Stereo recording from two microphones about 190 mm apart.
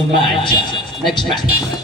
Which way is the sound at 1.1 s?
25° left (ahead or behind).